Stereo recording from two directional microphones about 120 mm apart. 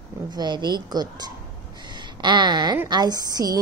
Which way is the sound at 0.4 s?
35° right (ahead or behind).